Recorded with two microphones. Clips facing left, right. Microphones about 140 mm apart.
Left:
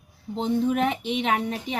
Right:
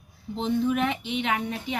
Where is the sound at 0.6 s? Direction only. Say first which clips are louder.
Left 2 dB; 40° left (ahead or behind).